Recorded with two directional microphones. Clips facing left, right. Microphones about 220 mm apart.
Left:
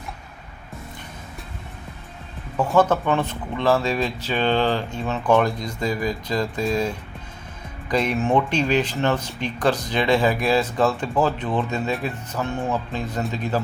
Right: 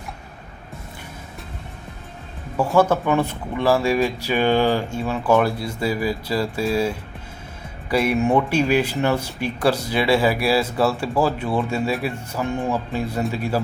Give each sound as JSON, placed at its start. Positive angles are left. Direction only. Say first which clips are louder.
{"t": 2.6, "sound": "speech", "louder": "right 1 dB", "side_deg": -10}
{"t": 7.9, "sound": "speech", "louder": "right 2 dB", "side_deg": -10}